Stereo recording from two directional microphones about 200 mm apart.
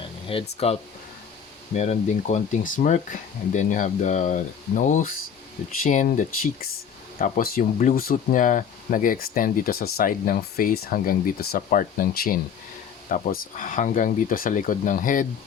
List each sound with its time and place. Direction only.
0.5 s speech: 30° left (ahead or behind)